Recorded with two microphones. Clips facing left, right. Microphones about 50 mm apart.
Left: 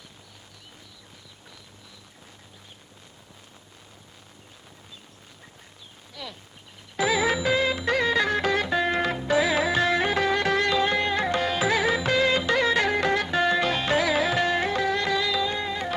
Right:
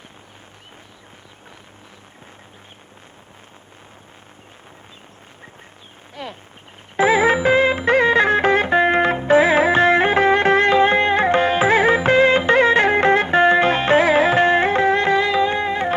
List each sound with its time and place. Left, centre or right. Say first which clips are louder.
6.2 s speech: right 7 dB; right
6.9 s music: right 8 dB; right